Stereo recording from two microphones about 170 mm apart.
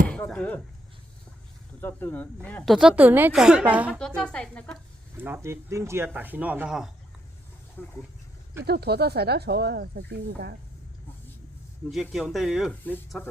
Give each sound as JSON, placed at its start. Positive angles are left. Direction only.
{"t": 0.1, "sound": "speech", "side_deg": 5}
{"t": 1.8, "sound": "speech", "side_deg": 10}
{"t": 2.7, "sound": "a woman's voice", "side_deg": -5}
{"t": 3.9, "sound": "speech", "side_deg": 5}
{"t": 5.1, "sound": "a woman's voice", "side_deg": -10}
{"t": 7.8, "sound": "speech", "side_deg": 10}
{"t": 8.6, "sound": "speech", "side_deg": -70}
{"t": 12.1, "sound": "speech", "side_deg": 0}